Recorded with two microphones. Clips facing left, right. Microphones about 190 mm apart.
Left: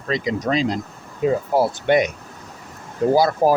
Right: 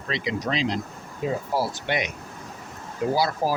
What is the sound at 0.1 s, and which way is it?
Speech, 45° left (ahead or behind).